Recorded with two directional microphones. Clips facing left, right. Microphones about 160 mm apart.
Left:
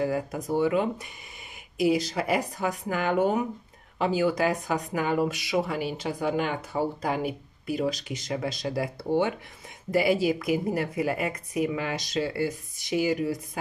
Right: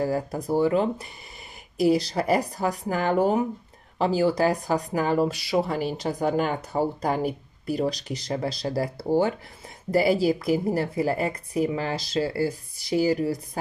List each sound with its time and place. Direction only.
0.0 s speech: 35° right (ahead or behind)